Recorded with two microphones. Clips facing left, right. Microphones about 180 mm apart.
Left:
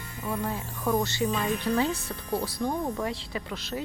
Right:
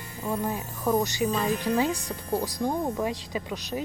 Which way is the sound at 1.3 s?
35° right (ahead or behind).